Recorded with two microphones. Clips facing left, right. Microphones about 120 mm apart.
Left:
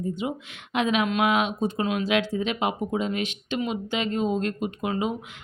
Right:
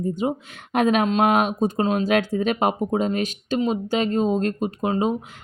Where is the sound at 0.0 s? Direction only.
40° right (ahead or behind).